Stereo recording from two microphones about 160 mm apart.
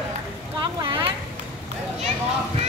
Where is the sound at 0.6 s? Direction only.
30° right (ahead or behind).